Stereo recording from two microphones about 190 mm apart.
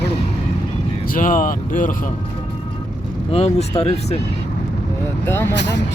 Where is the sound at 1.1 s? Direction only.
45° left (ahead or behind).